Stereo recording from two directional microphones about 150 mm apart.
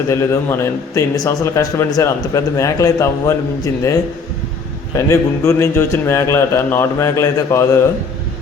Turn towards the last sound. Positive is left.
turn(degrees=20)  # may be behind; listen again after turning